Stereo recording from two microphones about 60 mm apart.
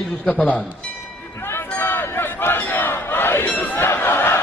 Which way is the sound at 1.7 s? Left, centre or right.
Left.